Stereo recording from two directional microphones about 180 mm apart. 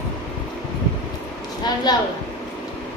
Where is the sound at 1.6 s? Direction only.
25° left (ahead or behind).